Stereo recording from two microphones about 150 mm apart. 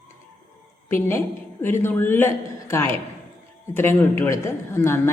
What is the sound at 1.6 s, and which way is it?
A woman's voice, 15° left (ahead or behind).